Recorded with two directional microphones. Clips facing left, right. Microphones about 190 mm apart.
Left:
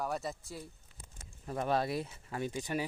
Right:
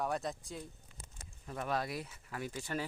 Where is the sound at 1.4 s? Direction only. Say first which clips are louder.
Left 5 dB; 35° left (ahead or behind); by 2.9 s 15° left (ahead or behind).